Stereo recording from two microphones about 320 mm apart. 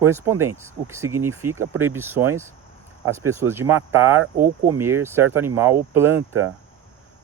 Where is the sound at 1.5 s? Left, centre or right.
Right.